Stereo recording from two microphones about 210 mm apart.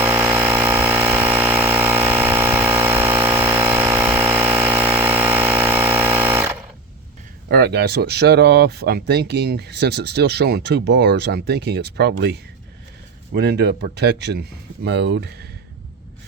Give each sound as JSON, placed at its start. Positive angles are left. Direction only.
{"t": 0.0, "sound": "engine", "side_deg": -10}
{"t": 7.4, "sound": "speech", "side_deg": -50}